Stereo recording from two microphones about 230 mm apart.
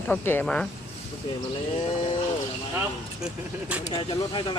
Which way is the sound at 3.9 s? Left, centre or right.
Left.